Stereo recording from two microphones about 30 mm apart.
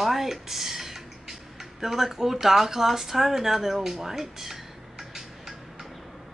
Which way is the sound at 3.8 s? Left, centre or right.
Centre.